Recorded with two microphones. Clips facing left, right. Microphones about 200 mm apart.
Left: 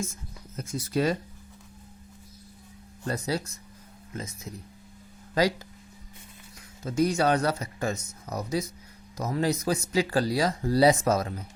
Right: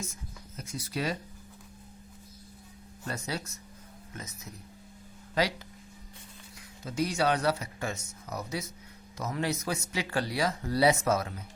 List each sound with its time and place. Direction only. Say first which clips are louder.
0.5 s speech: left 8 dB; 45° left (ahead or behind)
3.1 s speech: left 6 dB; 35° left (ahead or behind)
5.3 s speech: left 5 dB; 40° left (ahead or behind)
6.8 s speech: left 5 dB; 45° left (ahead or behind)